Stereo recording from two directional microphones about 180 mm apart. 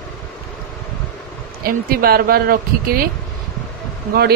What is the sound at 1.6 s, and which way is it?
A man's voice, 55° right (ahead or behind).